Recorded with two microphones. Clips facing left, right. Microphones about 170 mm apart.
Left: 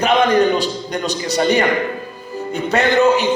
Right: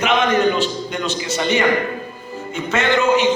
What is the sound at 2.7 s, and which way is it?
Speech, 35° left (ahead or behind).